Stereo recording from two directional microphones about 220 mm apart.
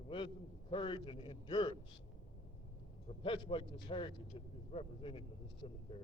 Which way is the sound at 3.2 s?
25° left (ahead or behind).